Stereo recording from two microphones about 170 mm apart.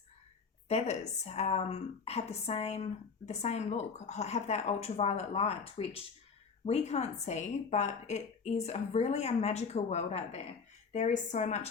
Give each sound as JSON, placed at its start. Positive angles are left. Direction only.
{"t": 0.7, "sound": "a woman's voice", "side_deg": 40}